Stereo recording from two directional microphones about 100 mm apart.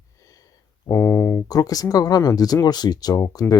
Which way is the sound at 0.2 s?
35° left (ahead or behind).